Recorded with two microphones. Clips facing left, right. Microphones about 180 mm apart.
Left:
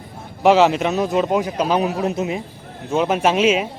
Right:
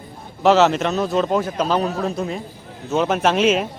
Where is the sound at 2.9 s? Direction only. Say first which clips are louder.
Left 1 dB; 10° left (ahead or behind).